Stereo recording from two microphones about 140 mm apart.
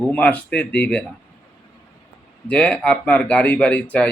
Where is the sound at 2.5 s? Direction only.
10° left (ahead or behind).